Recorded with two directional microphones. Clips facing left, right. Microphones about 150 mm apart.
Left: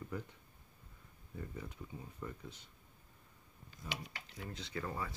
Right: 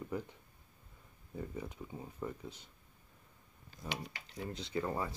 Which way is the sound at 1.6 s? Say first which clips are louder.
Right 4 dB; 30° right (ahead or behind).